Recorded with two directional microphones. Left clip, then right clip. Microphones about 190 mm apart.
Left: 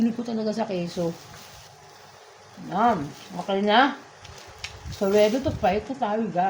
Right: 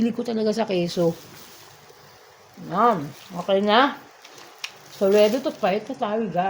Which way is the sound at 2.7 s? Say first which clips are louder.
Right 2 dB; 55° right (ahead or behind).